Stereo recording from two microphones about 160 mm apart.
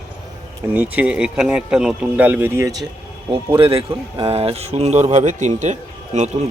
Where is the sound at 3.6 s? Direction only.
35° right (ahead or behind).